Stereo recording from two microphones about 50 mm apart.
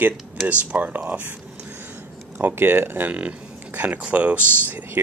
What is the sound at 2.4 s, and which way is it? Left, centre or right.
Speech, right.